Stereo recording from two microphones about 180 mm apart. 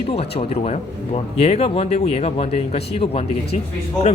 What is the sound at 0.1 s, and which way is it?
Speech, 35° left (ahead or behind).